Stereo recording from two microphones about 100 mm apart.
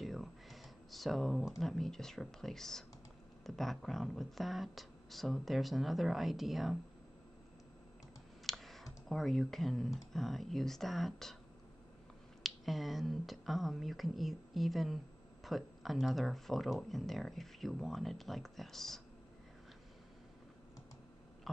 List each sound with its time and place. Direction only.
0.0 s a sound: centre (ahead or behind)
1.6 s speech: 5° left (ahead or behind)
8.5 s speech: centre (ahead or behind)
12.4 s speech: centre (ahead or behind)